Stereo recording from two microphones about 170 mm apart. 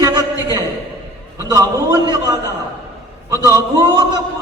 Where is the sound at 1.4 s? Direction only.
20° right (ahead or behind).